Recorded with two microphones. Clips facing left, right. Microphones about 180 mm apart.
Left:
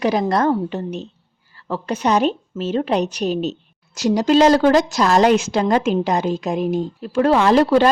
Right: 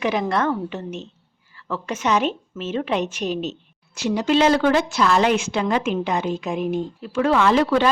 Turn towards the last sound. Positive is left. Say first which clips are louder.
# left 4 dB
turn(degrees=35)  # may be behind; listen again after turning